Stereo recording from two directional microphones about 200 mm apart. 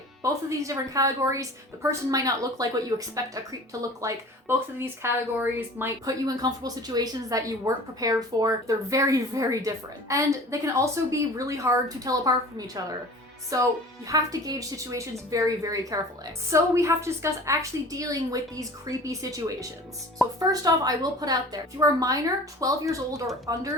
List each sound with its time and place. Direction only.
0.2 s a woman's voice: 15° right (ahead or behind)